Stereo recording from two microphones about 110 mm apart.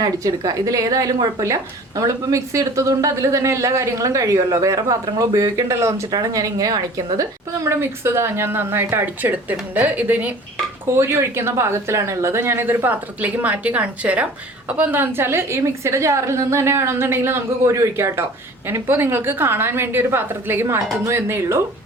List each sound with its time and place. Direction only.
0.0 s a woman's voice: 35° right (ahead or behind)